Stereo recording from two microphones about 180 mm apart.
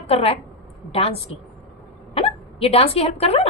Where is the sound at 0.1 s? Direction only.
35° left (ahead or behind).